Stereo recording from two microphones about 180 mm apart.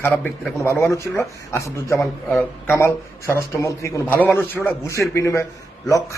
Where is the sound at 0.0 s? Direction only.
10° left (ahead or behind).